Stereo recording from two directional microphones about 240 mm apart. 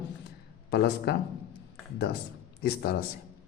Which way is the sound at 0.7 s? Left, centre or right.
Left.